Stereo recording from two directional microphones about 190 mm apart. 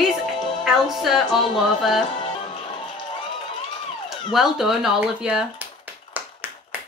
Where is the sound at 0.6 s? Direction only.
Centre (ahead or behind).